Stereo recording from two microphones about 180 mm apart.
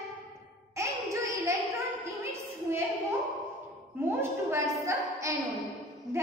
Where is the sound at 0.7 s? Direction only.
15° right (ahead or behind).